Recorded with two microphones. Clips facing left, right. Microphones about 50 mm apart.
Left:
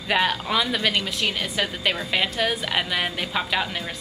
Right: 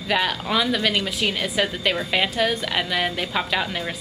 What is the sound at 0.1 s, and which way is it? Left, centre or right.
A woman's voice, centre.